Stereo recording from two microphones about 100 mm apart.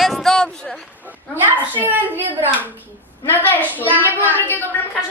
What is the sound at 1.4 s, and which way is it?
Speech, 20° right (ahead or behind).